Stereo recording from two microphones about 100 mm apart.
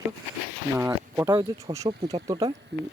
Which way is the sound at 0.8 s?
25° right (ahead or behind).